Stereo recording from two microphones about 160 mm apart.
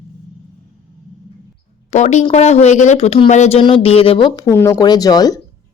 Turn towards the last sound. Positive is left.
turn(degrees=25)  # may be behind; listen again after turning